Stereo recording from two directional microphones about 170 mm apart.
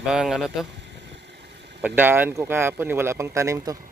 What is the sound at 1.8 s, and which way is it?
Speech, 10° right (ahead or behind).